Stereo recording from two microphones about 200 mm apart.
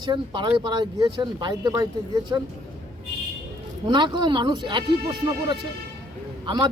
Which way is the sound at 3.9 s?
20° right (ahead or behind).